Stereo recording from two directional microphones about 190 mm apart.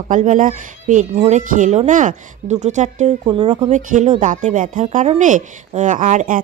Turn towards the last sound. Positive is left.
turn(degrees=-40)  # may be behind; listen again after turning